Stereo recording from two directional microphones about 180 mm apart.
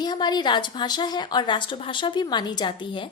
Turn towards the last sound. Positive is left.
turn(degrees=25)  # may be behind; listen again after turning